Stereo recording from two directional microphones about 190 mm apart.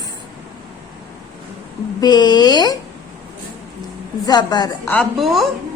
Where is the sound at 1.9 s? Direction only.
20° left (ahead or behind).